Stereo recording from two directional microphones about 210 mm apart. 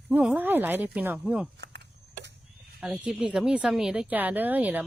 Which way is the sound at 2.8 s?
5° right (ahead or behind).